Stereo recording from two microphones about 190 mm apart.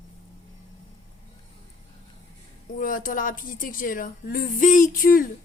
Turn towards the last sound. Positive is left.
turn(degrees=45)  # may be behind; listen again after turning